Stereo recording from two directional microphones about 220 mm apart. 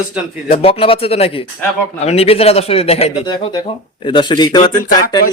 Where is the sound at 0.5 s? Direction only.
25° left (ahead or behind).